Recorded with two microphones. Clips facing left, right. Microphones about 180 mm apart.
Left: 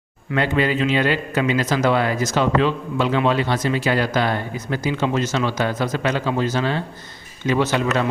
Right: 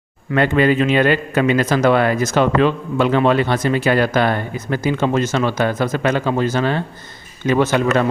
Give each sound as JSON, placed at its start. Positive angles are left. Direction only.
{"t": 0.3, "sound": "a man's voice", "side_deg": -55}